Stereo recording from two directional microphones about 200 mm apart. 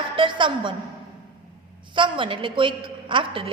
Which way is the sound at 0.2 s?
25° right (ahead or behind).